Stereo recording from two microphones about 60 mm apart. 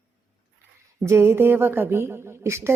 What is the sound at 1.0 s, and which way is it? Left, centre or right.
Speech, right.